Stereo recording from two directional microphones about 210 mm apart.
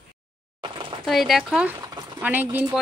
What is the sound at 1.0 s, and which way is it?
A woman's voice, centre (ahead or behind).